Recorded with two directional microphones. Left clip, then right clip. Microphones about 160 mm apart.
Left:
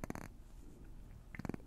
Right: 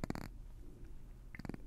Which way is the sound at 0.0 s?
20° right (ahead or behind).